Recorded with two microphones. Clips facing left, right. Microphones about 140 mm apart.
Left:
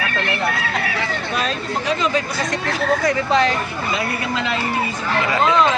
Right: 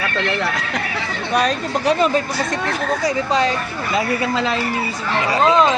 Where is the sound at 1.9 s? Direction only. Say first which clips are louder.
Right 4 dB; 40° right (ahead or behind).